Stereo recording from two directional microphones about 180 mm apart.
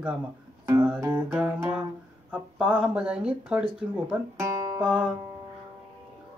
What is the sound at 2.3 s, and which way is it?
Speech, 10° right (ahead or behind).